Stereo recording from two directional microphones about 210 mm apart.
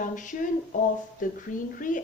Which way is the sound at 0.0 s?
40° left (ahead or behind).